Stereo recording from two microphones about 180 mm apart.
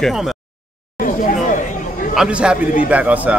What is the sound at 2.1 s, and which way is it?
A man's voice, 5° right (ahead or behind).